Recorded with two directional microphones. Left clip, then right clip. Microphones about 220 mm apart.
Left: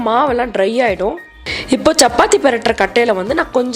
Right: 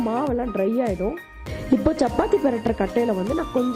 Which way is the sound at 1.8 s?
25° left (ahead or behind).